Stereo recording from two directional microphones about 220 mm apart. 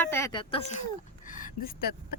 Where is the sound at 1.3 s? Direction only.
40° left (ahead or behind).